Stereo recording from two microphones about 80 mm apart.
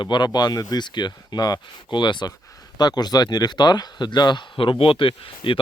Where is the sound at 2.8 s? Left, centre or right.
Left.